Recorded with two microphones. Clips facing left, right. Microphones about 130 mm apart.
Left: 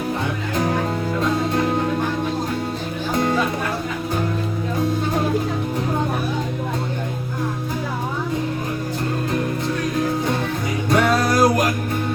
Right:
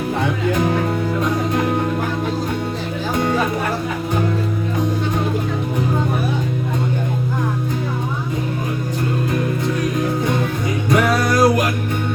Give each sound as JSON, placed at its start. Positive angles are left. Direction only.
{"t": 10.8, "sound": "music", "side_deg": 30}